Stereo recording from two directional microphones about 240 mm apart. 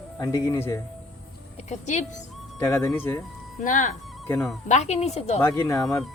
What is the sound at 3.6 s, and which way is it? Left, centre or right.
Speech, left.